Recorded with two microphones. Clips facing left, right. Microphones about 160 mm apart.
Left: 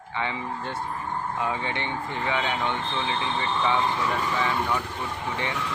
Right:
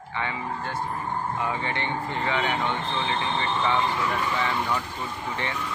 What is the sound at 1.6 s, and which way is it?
Speech, 15° left (ahead or behind).